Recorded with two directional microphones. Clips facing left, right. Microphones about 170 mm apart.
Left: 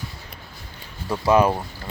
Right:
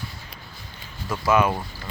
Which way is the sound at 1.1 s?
35° left (ahead or behind).